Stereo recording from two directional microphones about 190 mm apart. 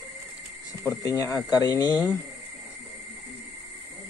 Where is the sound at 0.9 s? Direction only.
15° left (ahead or behind).